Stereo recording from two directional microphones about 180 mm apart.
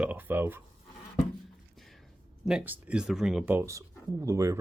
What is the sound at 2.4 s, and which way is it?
Speech, 5° right (ahead or behind).